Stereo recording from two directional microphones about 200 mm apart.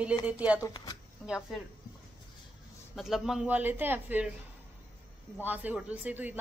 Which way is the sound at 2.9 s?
Centre (ahead or behind).